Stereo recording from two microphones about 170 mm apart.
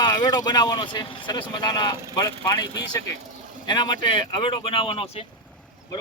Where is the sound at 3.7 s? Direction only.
25° left (ahead or behind).